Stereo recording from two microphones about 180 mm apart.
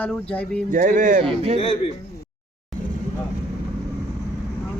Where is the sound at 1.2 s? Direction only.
30° right (ahead or behind).